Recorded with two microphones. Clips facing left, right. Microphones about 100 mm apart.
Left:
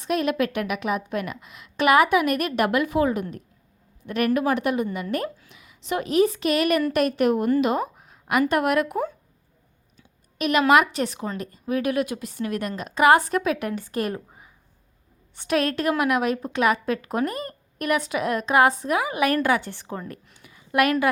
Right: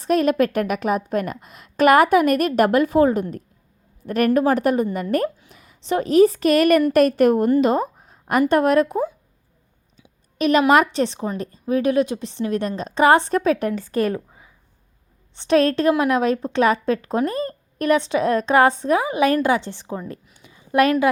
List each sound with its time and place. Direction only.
0.0 s a woman's voice: 40° right (ahead or behind)
10.3 s a woman's voice: 35° right (ahead or behind)
15.4 s a woman's voice: 30° right (ahead or behind)
20.4 s a sound: 25° right (ahead or behind)